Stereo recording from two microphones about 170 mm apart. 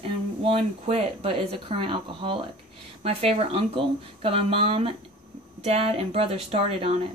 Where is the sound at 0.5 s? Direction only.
35° right (ahead or behind).